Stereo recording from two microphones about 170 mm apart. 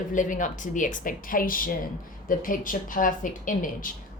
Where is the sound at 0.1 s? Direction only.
50° left (ahead or behind).